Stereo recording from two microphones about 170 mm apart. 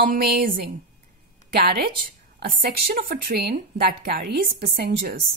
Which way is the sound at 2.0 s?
60° right (ahead or behind).